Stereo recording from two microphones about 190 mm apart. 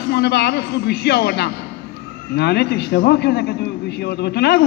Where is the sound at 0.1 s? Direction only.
60° left (ahead or behind).